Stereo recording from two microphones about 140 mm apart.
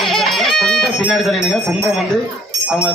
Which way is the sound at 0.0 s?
Centre (ahead or behind).